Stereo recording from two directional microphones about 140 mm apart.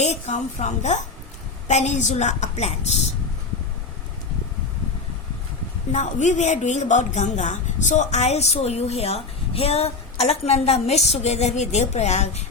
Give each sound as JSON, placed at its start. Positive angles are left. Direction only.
{"t": 0.0, "sound": "a woman's voice", "side_deg": 55}
{"t": 5.9, "sound": "a woman's voice", "side_deg": 60}